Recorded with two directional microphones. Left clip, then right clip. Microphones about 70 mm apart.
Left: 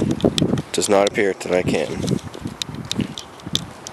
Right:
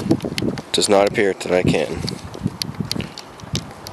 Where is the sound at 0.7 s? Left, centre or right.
Centre.